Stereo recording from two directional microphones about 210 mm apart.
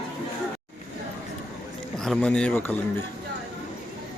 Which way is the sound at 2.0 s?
5° left (ahead or behind).